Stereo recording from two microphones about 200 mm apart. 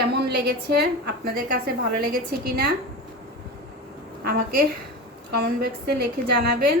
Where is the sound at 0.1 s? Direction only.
55° right (ahead or behind).